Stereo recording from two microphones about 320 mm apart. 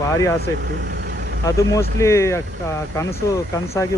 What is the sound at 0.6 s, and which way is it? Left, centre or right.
Vehicle, right.